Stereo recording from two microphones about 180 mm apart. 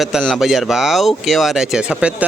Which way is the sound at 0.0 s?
Centre (ahead or behind).